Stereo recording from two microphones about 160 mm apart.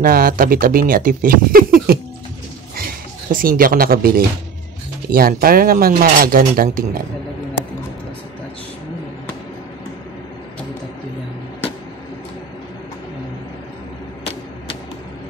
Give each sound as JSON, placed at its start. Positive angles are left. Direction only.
{"t": 0.0, "sound": "speech", "side_deg": -65}
{"t": 2.7, "sound": "a sound", "side_deg": -60}
{"t": 5.1, "sound": "speech", "side_deg": -65}